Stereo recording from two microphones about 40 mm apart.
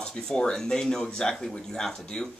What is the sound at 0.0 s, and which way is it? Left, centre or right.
Speech, centre.